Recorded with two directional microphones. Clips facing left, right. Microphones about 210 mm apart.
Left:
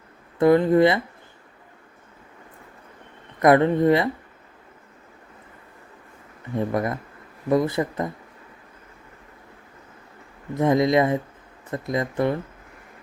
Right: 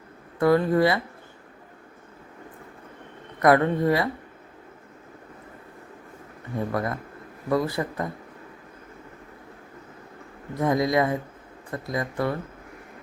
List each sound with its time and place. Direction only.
0.3 s speech: 20° left (ahead or behind)
3.4 s speech: 20° left (ahead or behind)
6.7 s speech: 20° left (ahead or behind)
10.5 s speech: 25° left (ahead or behind)